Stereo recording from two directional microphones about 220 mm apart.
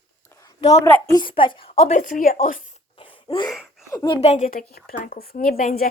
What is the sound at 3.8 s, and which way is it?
A woman's voice, 15° left (ahead or behind).